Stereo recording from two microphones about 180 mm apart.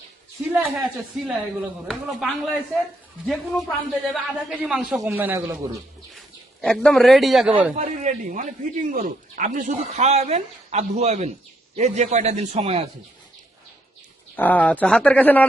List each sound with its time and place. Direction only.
0.4 s a man's voice: 5° right (ahead or behind)
6.1 s speech: 5° left (ahead or behind)
7.8 s speech: 45° right (ahead or behind)
14.3 s speech: 10° left (ahead or behind)